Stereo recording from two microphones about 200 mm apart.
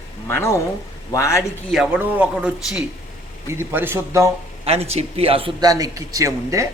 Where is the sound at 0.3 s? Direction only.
10° left (ahead or behind).